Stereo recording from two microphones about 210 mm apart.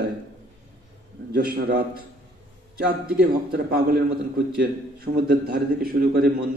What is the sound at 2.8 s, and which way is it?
A man's voice, 45° right (ahead or behind).